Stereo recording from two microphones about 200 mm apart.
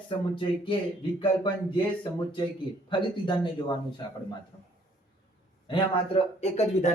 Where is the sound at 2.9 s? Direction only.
25° left (ahead or behind).